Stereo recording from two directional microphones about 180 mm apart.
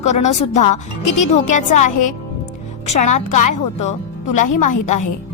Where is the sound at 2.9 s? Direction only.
40° left (ahead or behind).